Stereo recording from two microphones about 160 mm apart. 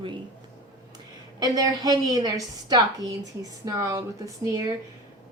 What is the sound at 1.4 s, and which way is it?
A woman's voice, 25° right (ahead or behind).